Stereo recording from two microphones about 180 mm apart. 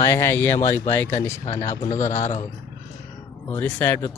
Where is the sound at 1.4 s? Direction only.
35° left (ahead or behind).